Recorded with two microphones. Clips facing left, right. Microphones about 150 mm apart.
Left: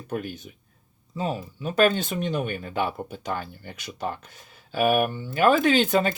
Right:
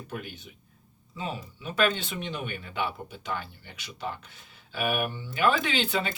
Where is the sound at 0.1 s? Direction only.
45° left (ahead or behind).